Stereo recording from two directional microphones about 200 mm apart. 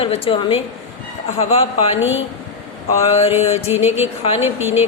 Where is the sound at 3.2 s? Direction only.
30° left (ahead or behind).